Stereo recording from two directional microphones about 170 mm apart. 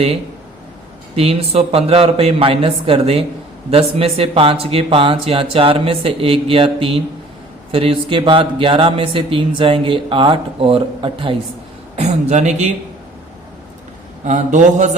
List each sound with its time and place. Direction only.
1.1 s speech: 35° right (ahead or behind)
11.9 s speech: 40° right (ahead or behind)
14.3 s speech: 45° right (ahead or behind)